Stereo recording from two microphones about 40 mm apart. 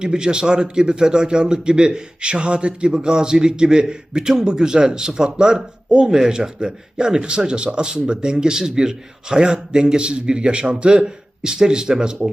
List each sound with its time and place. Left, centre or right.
0.0 s a man's voice: right